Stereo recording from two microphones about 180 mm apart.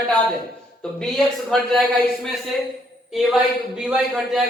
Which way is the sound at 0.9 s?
5° left (ahead or behind).